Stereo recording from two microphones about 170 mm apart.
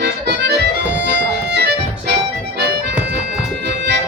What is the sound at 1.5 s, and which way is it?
Music, 85° right.